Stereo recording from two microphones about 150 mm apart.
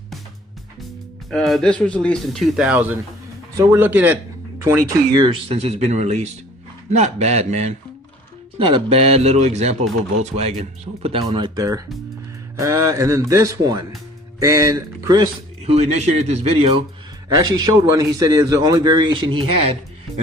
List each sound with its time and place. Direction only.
1.3 s a man's voice: centre (ahead or behind); by 5.2 s 20° right (ahead or behind)
5.2 s a man's voice: 40° right (ahead or behind)
8.5 s a man's voice: 35° right (ahead or behind)
15.6 s a man's voice: 45° right (ahead or behind)
17.2 s a man's voice: 25° right (ahead or behind)